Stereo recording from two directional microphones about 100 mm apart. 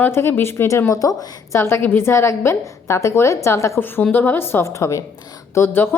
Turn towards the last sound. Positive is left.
turn(degrees=25)  # may be behind; listen again after turning